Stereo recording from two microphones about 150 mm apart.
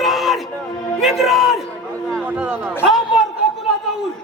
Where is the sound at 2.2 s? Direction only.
10° right (ahead or behind).